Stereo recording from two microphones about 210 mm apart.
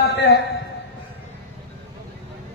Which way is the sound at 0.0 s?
55° left (ahead or behind).